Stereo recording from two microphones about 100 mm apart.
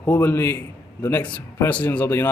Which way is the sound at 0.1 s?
20° left (ahead or behind).